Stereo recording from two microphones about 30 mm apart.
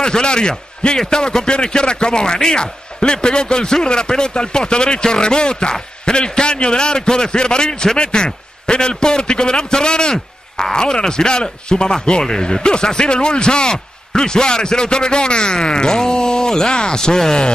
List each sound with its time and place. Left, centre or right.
0.0 s a man's voice: left